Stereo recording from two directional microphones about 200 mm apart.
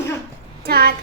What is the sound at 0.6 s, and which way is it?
Speech, 50° right (ahead or behind).